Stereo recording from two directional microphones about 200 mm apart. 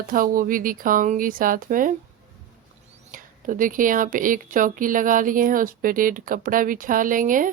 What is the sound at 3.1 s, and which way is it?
A woman's voice, 40° right (ahead or behind).